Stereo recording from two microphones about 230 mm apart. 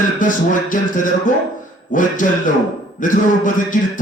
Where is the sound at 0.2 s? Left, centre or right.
Left.